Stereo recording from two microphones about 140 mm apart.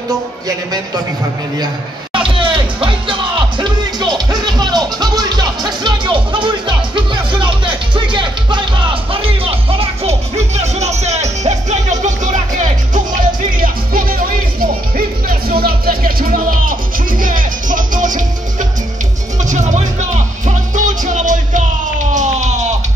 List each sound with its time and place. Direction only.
0.5 s a man's voice: 30° right (ahead or behind)
2.1 s music: 35° right (ahead or behind); by 12.4 s 60° right (ahead or behind)
13.6 s music: 90° right; by 22.8 s 55° right (ahead or behind)